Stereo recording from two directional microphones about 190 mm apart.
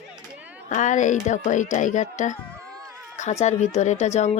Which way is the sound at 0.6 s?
40° left (ahead or behind).